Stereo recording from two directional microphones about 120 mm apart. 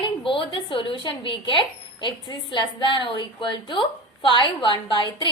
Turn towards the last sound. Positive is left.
turn(degrees=40)  # may be behind; listen again after turning